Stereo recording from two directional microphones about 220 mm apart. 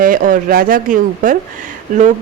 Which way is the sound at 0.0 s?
40° right (ahead or behind).